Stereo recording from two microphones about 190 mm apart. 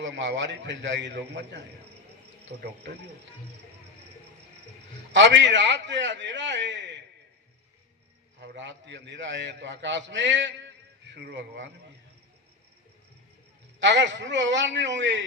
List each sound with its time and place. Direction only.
0.0 s a man's voice: 70° right (ahead or behind)
5.1 s a man's voice: 75° right (ahead or behind)
8.4 s a man's voice: 70° right (ahead or behind)
13.7 s a man's voice: 70° right (ahead or behind)